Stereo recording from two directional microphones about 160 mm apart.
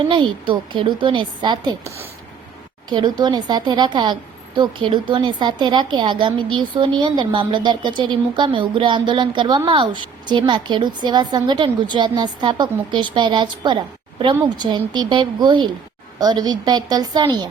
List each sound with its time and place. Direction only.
0.1 s a woman's voice: 30° right (ahead or behind)
2.9 s a woman's voice: 30° right (ahead or behind)